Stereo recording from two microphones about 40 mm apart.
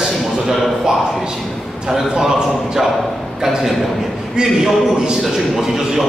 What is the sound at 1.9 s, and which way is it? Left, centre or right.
Speech, centre.